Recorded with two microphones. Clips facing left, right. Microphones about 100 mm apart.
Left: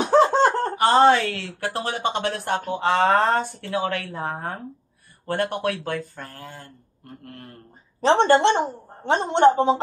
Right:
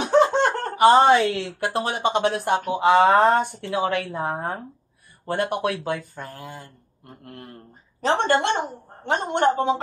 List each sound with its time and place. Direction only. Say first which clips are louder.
0.0 s laughter: left 1 dB; 30° left (ahead or behind)
0.7 s a woman's voice: right 3 dB; 15° right (ahead or behind)
8.0 s a man's voice: left 4 dB; 30° left (ahead or behind)